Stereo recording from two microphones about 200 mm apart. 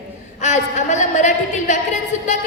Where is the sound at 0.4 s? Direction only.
35° left (ahead or behind).